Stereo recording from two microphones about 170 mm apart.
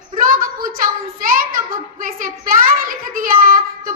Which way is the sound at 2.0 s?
55° right (ahead or behind).